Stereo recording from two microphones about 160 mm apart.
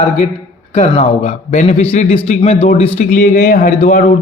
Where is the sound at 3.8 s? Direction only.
55° left (ahead or behind).